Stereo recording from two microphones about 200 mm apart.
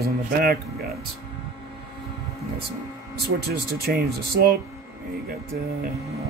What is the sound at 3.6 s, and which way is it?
Speech, 50° right (ahead or behind).